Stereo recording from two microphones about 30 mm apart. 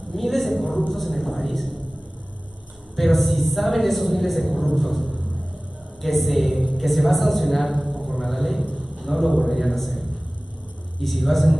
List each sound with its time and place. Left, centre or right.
0.1 s a man's voice: centre
3.0 s a woman's voice: centre